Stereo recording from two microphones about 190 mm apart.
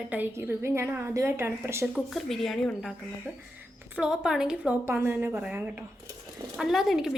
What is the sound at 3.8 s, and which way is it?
A woman's voice, 10° right (ahead or behind).